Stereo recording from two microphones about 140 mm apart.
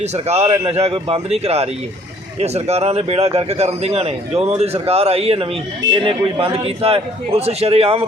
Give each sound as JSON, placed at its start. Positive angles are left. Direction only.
{"t": 0.0, "sound": "speech", "side_deg": -50}